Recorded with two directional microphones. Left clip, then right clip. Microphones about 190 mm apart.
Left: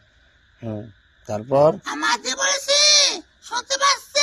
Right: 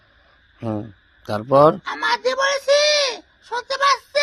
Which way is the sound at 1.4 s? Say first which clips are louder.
Right 3 dB; 35° right (ahead or behind).